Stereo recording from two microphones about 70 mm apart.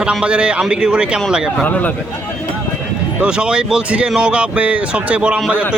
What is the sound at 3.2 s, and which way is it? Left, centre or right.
Speech, centre.